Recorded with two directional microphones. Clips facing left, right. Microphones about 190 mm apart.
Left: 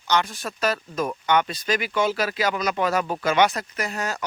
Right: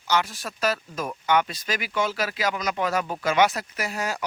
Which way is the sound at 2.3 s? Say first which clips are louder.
Left 3 dB; 60° left (ahead or behind).